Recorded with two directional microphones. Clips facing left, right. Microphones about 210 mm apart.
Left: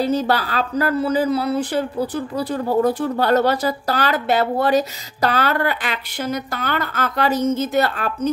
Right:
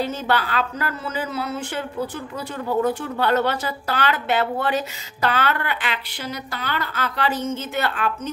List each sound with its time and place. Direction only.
0.0 s speech: 35° left (ahead or behind)